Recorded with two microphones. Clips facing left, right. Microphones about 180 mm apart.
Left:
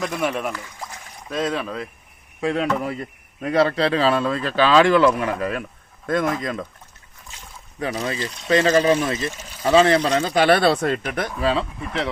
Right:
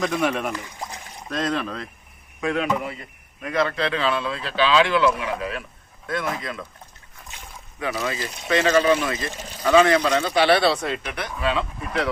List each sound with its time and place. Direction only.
0.0 s speech: centre (ahead or behind)
0.5 s a sound: 20° right (ahead or behind)
1.3 s speech: 5° left (ahead or behind)
2.4 s a man's voice: 30° left (ahead or behind)
7.8 s a man's voice: 40° left (ahead or behind)